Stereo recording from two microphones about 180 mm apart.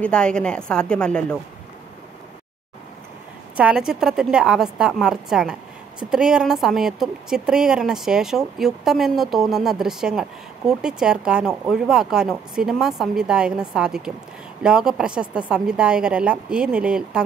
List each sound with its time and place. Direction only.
0.0 s a woman's voice: 5° left (ahead or behind)
3.5 s a woman's voice: 5° right (ahead or behind)